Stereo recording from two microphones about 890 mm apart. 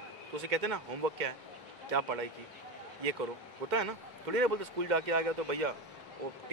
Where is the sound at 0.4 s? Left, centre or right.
Right.